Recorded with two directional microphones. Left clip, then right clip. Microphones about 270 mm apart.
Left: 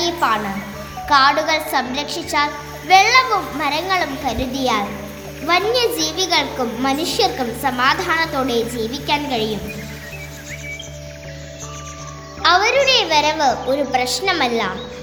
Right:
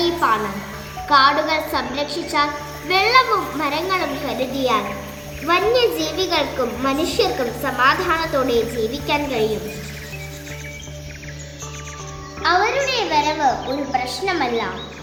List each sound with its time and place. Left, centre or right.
0.0 s music: left
1.0 s a woman's voice: left
12.4 s a sound: left
13.9 s a woman's voice: left